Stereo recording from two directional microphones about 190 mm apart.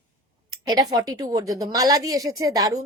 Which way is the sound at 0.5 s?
20° right (ahead or behind).